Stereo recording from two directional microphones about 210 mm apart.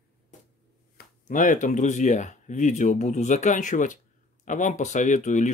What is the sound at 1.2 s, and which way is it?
Speech, 40° left (ahead or behind).